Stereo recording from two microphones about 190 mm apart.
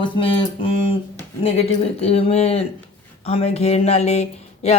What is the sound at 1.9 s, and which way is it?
Speech, 30° left (ahead or behind).